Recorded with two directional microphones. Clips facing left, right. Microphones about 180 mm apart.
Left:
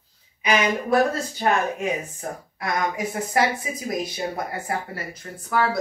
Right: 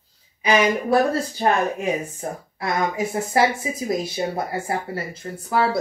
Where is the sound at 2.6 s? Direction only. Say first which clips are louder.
Right 2 dB; 25° right (ahead or behind).